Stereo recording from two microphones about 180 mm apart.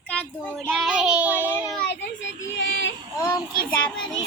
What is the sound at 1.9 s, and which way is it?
Child singing, 85° left.